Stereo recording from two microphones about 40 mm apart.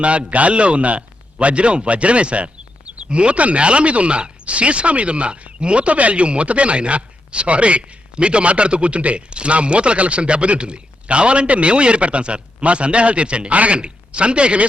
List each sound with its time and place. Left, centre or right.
0.0 s a man's voice: right